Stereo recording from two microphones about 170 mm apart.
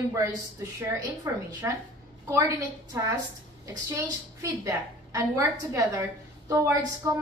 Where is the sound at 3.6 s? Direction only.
20° right (ahead or behind).